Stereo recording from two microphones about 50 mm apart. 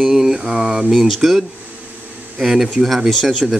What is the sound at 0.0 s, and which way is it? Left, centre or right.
Speech, centre.